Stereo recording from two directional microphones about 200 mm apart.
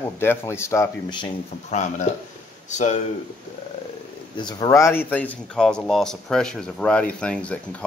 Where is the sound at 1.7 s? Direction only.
35° left (ahead or behind).